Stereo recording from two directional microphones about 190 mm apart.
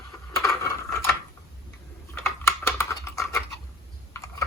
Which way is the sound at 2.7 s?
15° left (ahead or behind).